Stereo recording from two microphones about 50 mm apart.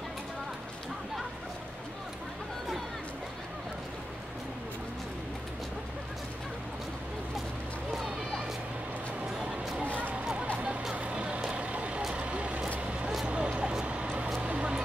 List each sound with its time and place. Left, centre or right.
9.3 s a sound: centre
10.4 s music: right
11.0 s vehicle: right
14.4 s music: right